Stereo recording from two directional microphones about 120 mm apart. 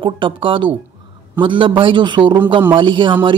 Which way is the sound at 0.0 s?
45° right (ahead or behind).